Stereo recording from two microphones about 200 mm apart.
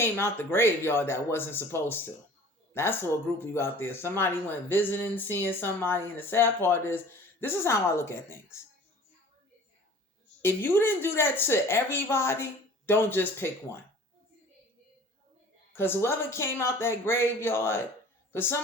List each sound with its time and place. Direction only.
0.0 s speech: 10° left (ahead or behind)
10.4 s speech: 10° left (ahead or behind)
15.7 s speech: 10° left (ahead or behind)